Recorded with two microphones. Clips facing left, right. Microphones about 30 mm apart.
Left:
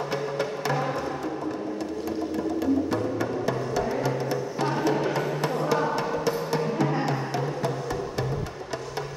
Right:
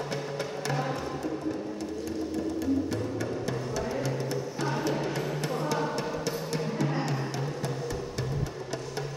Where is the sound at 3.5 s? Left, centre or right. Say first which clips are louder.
Left 5 dB; centre.